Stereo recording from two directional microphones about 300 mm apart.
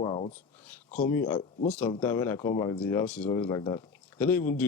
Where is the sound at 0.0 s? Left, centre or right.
Centre.